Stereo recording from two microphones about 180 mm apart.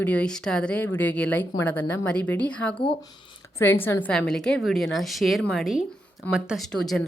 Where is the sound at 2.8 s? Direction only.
30° left (ahead or behind).